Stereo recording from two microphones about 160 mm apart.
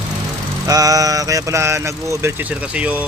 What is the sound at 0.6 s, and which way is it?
Speech, 20° right (ahead or behind).